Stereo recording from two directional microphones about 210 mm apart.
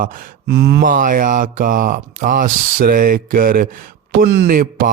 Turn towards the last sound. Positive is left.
turn(degrees=-40)  # may be behind; listen again after turning